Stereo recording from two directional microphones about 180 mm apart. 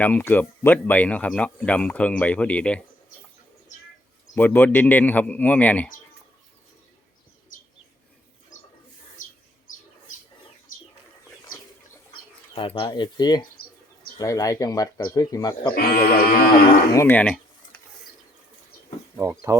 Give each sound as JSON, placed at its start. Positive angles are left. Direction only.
{"t": 0.0, "sound": "speech", "side_deg": 10}
{"t": 4.4, "sound": "speech", "side_deg": 10}
{"t": 9.2, "sound": "bird", "side_deg": 45}
{"t": 12.5, "sound": "speech", "side_deg": 30}
{"t": 15.7, "sound": "livestock", "side_deg": 55}
{"t": 16.9, "sound": "speech", "side_deg": 15}
{"t": 19.2, "sound": "speech", "side_deg": -15}